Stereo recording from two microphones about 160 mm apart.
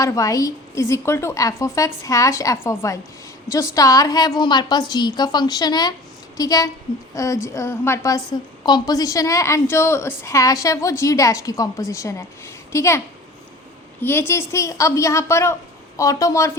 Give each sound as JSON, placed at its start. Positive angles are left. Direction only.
{"t": 0.0, "sound": "a woman's voice", "side_deg": 20}
{"t": 14.0, "sound": "a woman's voice", "side_deg": 15}